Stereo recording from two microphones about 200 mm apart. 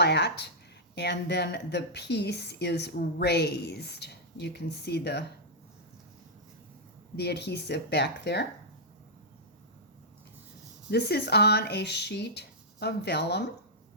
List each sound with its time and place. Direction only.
0.0 s speech: 55° left (ahead or behind)
7.2 s speech: 55° left (ahead or behind)
10.9 s speech: 55° left (ahead or behind)